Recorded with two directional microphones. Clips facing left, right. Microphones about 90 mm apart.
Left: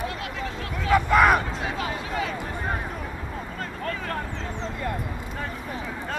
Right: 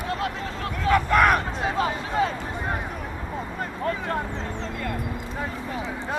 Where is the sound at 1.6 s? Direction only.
35° right (ahead or behind).